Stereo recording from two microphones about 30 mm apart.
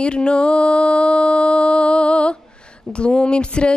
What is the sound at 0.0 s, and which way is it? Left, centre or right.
Mantra, left.